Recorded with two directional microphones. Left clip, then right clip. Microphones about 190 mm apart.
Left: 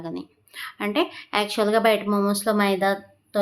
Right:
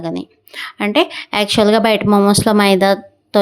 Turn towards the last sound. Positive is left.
turn(degrees=-50)  # may be behind; listen again after turning